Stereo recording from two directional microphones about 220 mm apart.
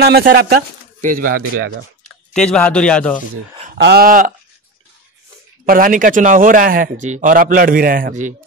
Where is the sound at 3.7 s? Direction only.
50° right (ahead or behind).